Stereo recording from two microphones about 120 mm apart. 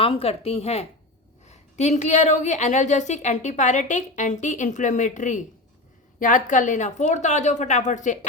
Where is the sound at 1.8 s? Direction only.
75° left (ahead or behind).